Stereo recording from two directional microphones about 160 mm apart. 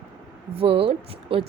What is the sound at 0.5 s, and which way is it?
Speech, 35° right (ahead or behind).